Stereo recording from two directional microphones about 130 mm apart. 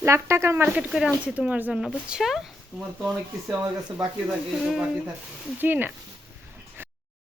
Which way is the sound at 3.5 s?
10° right (ahead or behind).